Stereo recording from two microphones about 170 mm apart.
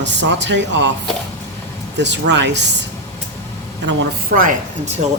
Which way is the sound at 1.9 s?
90° right.